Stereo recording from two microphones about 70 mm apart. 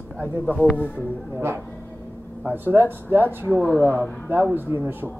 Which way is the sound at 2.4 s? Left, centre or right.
Right.